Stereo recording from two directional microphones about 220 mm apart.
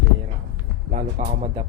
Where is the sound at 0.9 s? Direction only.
30° right (ahead or behind).